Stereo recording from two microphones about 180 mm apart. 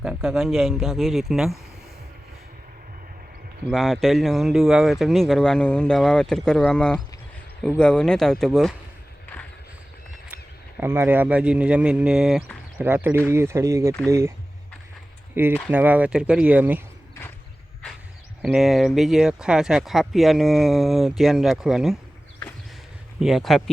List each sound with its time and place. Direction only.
0.0 s speech: 5° right (ahead or behind)
3.7 s speech: centre (ahead or behind)
10.2 s speech: 10° right (ahead or behind)
15.3 s speech: 10° right (ahead or behind)
18.4 s speech: centre (ahead or behind)
23.2 s speech: centre (ahead or behind)